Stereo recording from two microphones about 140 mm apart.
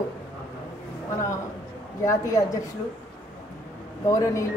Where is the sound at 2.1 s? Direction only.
25° left (ahead or behind).